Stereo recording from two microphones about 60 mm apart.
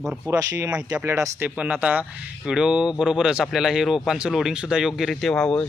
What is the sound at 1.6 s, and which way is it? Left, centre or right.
Speech, right.